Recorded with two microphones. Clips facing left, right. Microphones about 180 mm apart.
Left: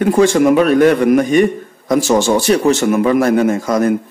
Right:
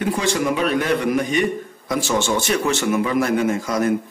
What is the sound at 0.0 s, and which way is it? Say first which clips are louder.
A man's voice: left 10 dB; 50° left (ahead or behind).